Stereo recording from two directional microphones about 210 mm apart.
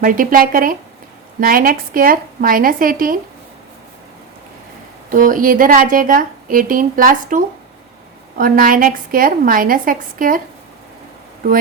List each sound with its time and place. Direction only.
0.0 s a woman's voice: 40° right (ahead or behind)
5.0 s a woman's voice: 40° right (ahead or behind)